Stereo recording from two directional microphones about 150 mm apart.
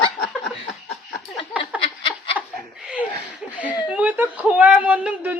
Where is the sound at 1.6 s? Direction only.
35° left (ahead or behind).